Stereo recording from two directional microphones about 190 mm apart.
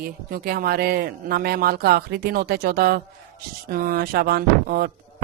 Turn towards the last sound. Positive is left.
turn(degrees=-50)  # may be behind; listen again after turning